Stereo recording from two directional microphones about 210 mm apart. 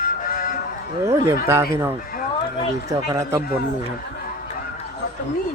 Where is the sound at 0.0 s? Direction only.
40° left (ahead or behind).